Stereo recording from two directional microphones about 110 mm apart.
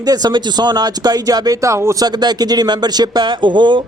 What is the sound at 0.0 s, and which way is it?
A man's voice, 35° right (ahead or behind).